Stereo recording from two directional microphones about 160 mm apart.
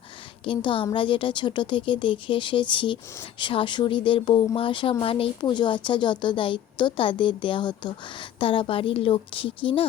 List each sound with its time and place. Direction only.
0.4 s a woman's voice: 30° left (ahead or behind)